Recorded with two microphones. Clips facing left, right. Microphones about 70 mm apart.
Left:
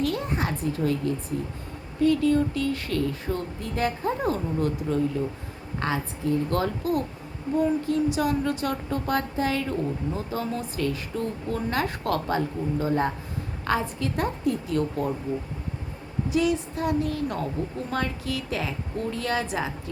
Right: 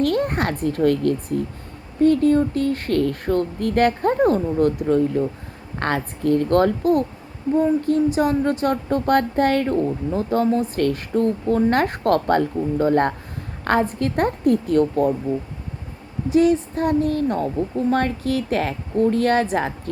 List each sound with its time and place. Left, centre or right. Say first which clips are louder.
0.0 s a child's voice: right 7 dB; right
2.0 s a woman's voice: right 5 dB; right
10.8 s a woman's voice: right 8 dB; right
16.3 s a woman's voice: right 8 dB; right